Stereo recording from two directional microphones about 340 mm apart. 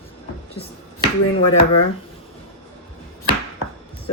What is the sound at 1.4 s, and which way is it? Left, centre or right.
Speech, left.